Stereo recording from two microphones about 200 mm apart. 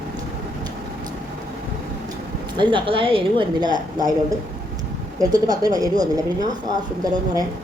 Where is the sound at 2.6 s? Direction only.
25° right (ahead or behind).